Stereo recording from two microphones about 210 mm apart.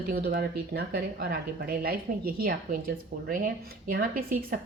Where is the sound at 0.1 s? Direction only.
50° right (ahead or behind).